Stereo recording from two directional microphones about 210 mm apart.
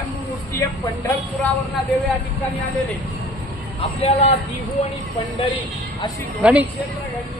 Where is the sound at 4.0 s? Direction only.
30° left (ahead or behind).